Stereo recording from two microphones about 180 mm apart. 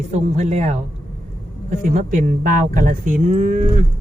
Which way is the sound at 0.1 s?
40° right (ahead or behind).